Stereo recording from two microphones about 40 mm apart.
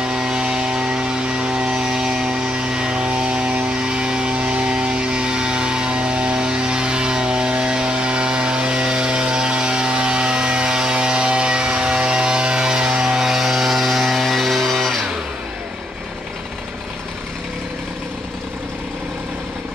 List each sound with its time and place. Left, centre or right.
0.0 s vehicle: centre